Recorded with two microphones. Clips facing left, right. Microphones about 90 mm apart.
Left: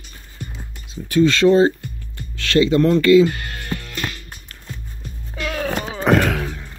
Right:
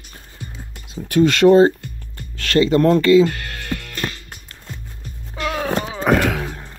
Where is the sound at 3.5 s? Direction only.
90° right.